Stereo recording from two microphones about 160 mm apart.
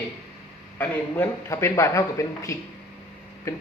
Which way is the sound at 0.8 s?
15° left (ahead or behind).